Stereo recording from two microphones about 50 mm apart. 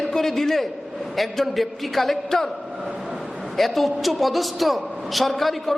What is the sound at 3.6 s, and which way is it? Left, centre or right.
A woman's voice, centre.